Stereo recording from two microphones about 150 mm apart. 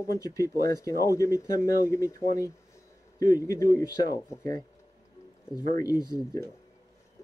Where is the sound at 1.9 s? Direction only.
20° left (ahead or behind).